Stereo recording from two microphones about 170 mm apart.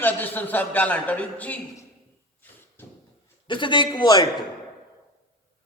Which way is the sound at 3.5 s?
30° left (ahead or behind).